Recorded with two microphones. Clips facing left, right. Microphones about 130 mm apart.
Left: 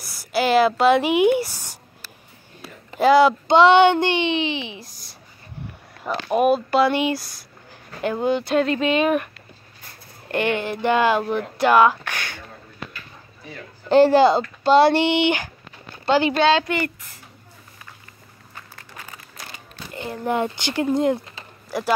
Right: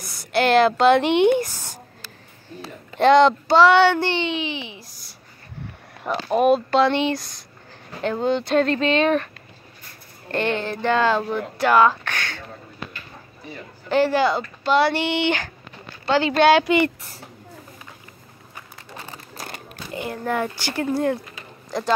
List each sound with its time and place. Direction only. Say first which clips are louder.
0.3 s speech: right 1 dB; 5° left (ahead or behind)
3.0 s speech: even; 5° left (ahead or behind)
3.4 s speech: left 1 dB; 20° left (ahead or behind)
6.0 s speech: right 1 dB; 10° right (ahead or behind)
6.3 s speech: right 1 dB; 5° left (ahead or behind)
10.3 s speech: left 1 dB; 15° left (ahead or behind)
13.8 s speech: left 5 dB; 30° left (ahead or behind)
16.4 s speech: right 3 dB; 15° right (ahead or behind)
18.9 s a sound: right 4 dB; 35° right (ahead or behind)
20.2 s speech: left 3 dB; 20° left (ahead or behind)